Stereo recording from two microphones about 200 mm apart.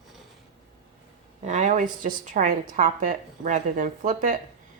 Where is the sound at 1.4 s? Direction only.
35° right (ahead or behind).